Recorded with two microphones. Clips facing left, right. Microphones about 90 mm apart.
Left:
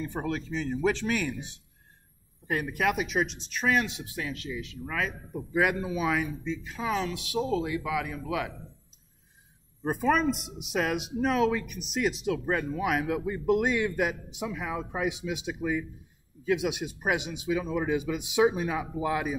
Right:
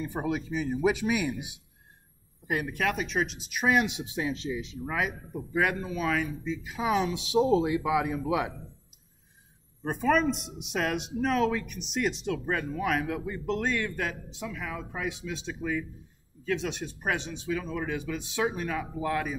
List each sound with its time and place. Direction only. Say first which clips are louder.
0.0 s speech: right 1 dB; 10° right (ahead or behind)
5.3 s speech: left 3 dB; centre (ahead or behind); by 8.5 s 25° right (ahead or behind)
9.8 s speech: even; 5° left (ahead or behind)